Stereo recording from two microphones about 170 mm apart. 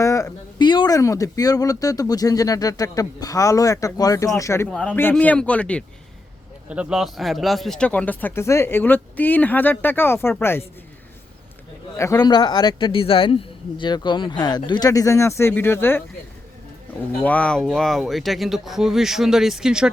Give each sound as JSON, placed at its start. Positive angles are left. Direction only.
{"t": 0.0, "sound": "speech", "side_deg": 20}
{"t": 6.7, "sound": "speech", "side_deg": -5}
{"t": 11.9, "sound": "speech", "side_deg": 20}
{"t": 17.2, "sound": "speech", "side_deg": 10}